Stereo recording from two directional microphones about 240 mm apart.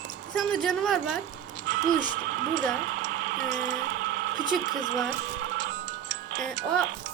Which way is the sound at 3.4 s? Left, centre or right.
Right.